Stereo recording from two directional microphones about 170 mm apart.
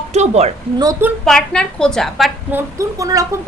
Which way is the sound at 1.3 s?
5° left (ahead or behind).